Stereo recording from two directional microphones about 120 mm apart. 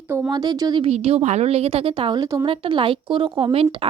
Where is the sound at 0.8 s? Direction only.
55° right (ahead or behind).